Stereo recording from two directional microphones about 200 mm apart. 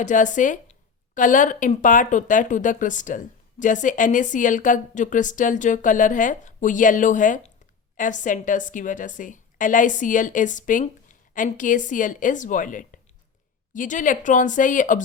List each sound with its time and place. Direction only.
0.0 s a woman's voice: 40° left (ahead or behind)